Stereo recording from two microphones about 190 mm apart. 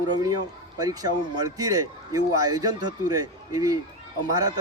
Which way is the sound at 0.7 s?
20° right (ahead or behind).